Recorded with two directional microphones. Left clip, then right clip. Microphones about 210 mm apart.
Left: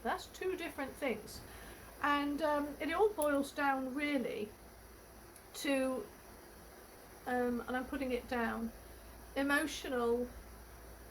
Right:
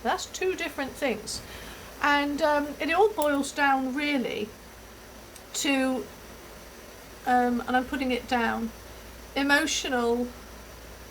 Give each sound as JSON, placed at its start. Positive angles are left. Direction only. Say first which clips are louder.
{"t": 0.0, "sound": "a woman's voice", "louder": "right 11 dB", "side_deg": -20}
{"t": 5.5, "sound": "speech", "louder": "right 9 dB", "side_deg": -20}
{"t": 7.3, "sound": "a woman's voice", "louder": "right 12 dB", "side_deg": -20}